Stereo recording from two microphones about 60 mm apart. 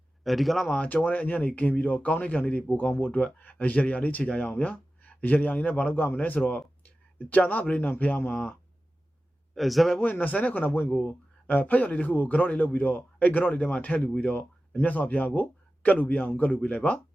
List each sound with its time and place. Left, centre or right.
0.3 s a man's voice: centre
0.7 s a man's voice: left
3.2 s a man's voice: left
9.6 s a man's voice: centre
10.0 s speech: left